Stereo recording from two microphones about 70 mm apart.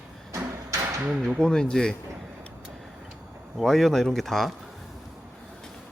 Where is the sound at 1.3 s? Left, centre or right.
Centre.